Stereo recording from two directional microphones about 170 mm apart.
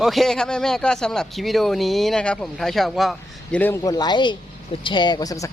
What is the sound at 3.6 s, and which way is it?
A man's voice, 15° left (ahead or behind).